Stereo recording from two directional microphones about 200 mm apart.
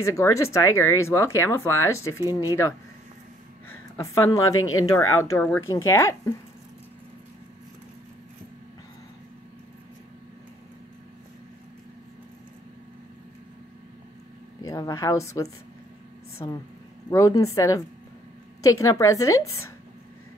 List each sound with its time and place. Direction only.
0.0 s speech: 15° left (ahead or behind)
2.1 s speech: 15° right (ahead or behind)
3.6 s speech: 10° left (ahead or behind)
4.6 s speech: 90° left
5.2 s speech: 10° left (ahead or behind)
14.6 s a woman's voice: 15° left (ahead or behind)